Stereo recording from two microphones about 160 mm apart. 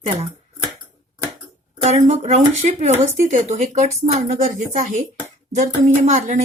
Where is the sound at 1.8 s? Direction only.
45° right (ahead or behind).